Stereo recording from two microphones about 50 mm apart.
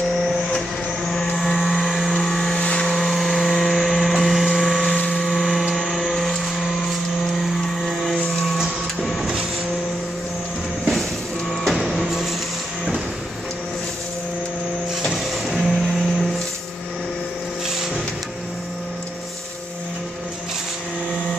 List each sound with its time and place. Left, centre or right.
0.0 s vehicle: centre
2.6 s vehicle: left
2.9 s a sound: centre
5.1 s vehicle: centre
5.8 s a sound: centre
11.7 s printer: centre
15.5 s printer: centre